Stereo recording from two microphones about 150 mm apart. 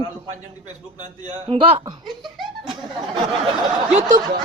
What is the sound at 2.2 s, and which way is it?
Laughter, centre (ahead or behind).